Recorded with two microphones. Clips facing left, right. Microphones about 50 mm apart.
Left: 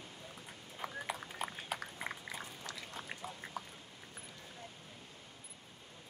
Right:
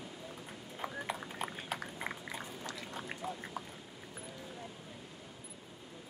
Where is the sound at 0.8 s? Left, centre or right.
Right.